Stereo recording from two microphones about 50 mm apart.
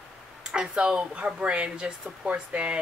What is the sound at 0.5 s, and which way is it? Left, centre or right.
Speech, centre.